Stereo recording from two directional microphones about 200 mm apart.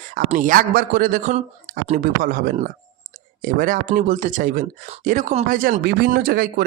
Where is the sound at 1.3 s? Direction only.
35° right (ahead or behind).